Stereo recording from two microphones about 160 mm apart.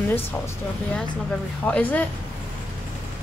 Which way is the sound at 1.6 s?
10° left (ahead or behind).